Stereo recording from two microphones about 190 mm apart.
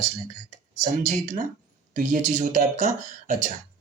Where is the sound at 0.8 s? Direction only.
40° right (ahead or behind).